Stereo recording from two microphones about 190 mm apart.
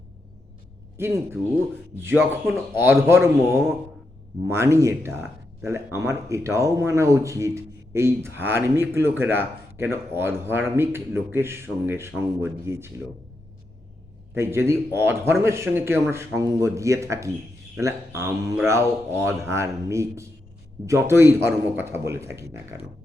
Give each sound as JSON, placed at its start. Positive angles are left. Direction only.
{"t": 0.9, "sound": "speech", "side_deg": -10}
{"t": 14.3, "sound": "speech", "side_deg": -15}